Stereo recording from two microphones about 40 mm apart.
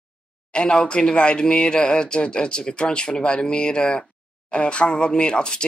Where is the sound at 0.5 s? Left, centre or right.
Left.